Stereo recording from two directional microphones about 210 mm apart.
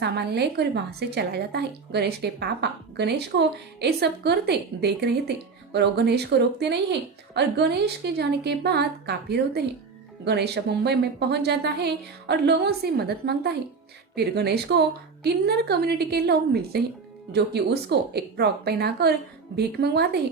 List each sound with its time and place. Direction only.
0.0 s a woman's voice: 50° right (ahead or behind)